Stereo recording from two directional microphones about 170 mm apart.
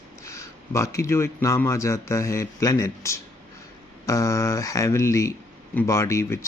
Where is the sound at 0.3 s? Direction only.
15° left (ahead or behind).